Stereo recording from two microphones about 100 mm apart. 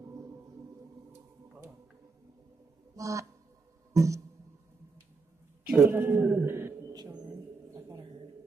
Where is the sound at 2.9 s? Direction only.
35° right (ahead or behind).